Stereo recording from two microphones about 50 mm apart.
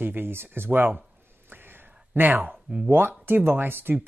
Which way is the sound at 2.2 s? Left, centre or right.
Right.